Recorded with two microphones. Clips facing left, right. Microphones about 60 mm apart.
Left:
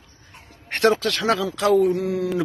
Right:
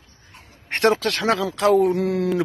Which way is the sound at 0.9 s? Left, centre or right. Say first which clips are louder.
Even; right.